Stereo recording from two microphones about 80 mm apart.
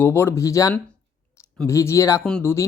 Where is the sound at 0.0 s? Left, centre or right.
Left.